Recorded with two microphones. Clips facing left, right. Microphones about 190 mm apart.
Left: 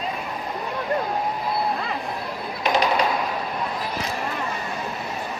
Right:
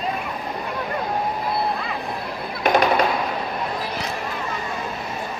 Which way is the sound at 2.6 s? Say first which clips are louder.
Right 3 dB; 55° right (ahead or behind).